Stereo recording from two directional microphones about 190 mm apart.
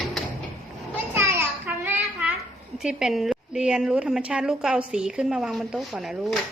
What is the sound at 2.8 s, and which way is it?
A woman's voice, 5° right (ahead or behind).